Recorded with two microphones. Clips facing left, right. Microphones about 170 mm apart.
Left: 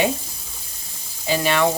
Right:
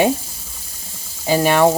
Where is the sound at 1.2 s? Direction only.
45° right (ahead or behind).